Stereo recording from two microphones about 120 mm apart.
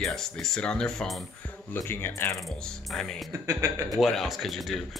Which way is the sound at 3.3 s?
25° right (ahead or behind).